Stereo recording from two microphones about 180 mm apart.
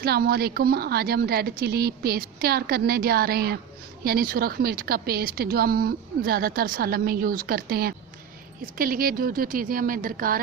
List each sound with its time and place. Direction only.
0.0 s a woman's voice: 60° right (ahead or behind)